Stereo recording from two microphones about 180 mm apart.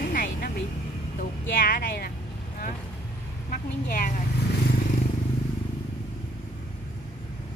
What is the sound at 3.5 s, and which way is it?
Speech, 45° left (ahead or behind).